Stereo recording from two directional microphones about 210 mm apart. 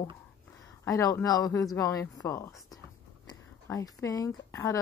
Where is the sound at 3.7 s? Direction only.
15° left (ahead or behind).